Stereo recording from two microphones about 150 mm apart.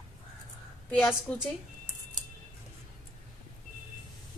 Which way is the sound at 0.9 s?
Centre (ahead or behind).